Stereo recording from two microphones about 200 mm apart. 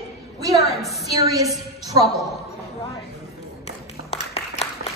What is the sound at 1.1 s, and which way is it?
Speech, 15° right (ahead or behind).